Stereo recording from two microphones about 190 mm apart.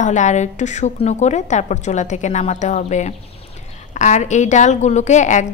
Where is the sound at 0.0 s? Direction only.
40° left (ahead or behind).